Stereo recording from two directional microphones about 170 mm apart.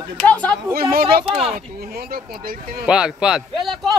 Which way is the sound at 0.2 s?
5° left (ahead or behind).